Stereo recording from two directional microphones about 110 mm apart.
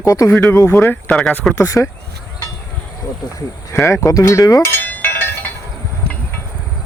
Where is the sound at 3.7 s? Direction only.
25° left (ahead or behind).